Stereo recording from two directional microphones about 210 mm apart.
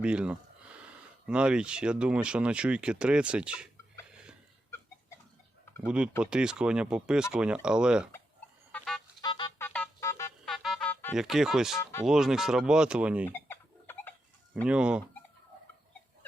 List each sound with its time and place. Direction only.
0.0 s a sound: 5° right (ahead or behind)
1.3 s speech: 5° right (ahead or behind)
5.8 s speech: 5° right (ahead or behind)
8.7 s a sound: centre (ahead or behind)
9.2 s music: 20° left (ahead or behind)
9.6 s music: 10° left (ahead or behind)
10.4 s music: centre (ahead or behind)
11.8 s speech: 10° left (ahead or behind)
12.0 s speech: centre (ahead or behind)
13.2 s chicken: 10° left (ahead or behind)
14.5 s speech: 5° right (ahead or behind)